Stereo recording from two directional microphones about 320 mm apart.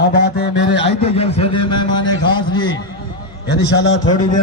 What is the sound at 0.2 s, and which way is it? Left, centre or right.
Mantra, left.